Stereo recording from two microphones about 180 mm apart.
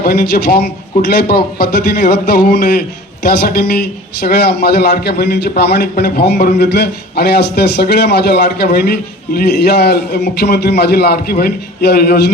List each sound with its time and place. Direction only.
0.0 s a man's voice: 65° left (ahead or behind)
0.9 s a man's voice: 55° left (ahead or behind)